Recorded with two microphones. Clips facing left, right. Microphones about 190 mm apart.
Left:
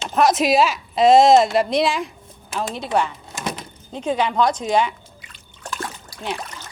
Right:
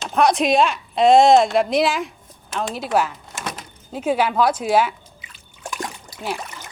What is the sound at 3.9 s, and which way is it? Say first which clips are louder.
Drip: right 1 dB; 10° right (ahead or behind).